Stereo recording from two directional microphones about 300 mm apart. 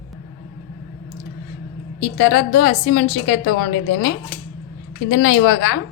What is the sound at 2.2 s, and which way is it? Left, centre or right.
A woman's voice, left.